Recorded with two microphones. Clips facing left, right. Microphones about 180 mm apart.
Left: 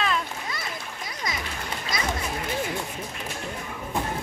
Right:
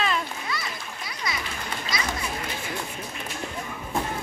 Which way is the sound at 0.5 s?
45° left (ahead or behind).